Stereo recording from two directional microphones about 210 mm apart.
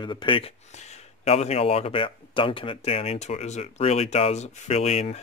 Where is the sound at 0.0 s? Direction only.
20° left (ahead or behind).